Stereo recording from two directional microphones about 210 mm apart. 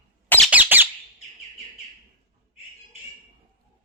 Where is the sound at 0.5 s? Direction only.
10° right (ahead or behind).